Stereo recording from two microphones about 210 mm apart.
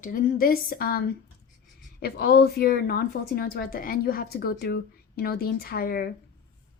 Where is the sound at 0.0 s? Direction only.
40° left (ahead or behind).